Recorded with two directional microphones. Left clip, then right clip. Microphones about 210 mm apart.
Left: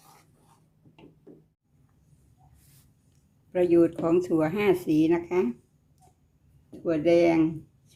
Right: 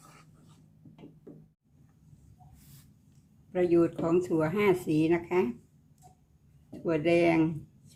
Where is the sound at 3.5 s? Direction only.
20° left (ahead or behind).